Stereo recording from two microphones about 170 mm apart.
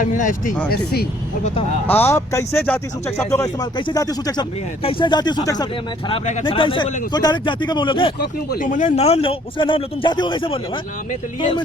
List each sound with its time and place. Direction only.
0.0 s speech: 50° left (ahead or behind)
0.7 s speech: 65° left (ahead or behind)
1.9 s speech: 15° left (ahead or behind)
6.1 s speech: 45° left (ahead or behind)
6.4 s speech: 30° left (ahead or behind)
8.2 s speech: 60° left (ahead or behind); by 10.6 s 30° left (ahead or behind)